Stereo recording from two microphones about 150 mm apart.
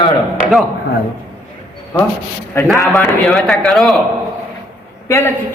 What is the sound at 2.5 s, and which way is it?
Speech, 15° left (ahead or behind).